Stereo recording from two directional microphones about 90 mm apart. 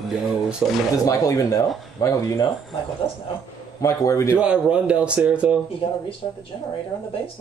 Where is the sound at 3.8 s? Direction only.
35° left (ahead or behind).